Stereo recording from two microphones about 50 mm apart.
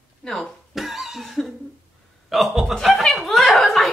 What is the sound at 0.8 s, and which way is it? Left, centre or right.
Cough, centre.